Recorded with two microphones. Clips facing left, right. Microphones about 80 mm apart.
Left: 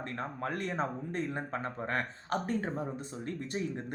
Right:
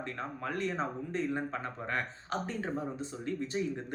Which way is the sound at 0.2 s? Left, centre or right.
Left.